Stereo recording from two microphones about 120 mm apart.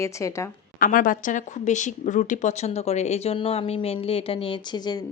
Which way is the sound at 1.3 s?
85° left.